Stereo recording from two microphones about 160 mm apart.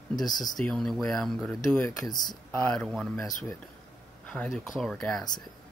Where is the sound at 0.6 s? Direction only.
5° left (ahead or behind).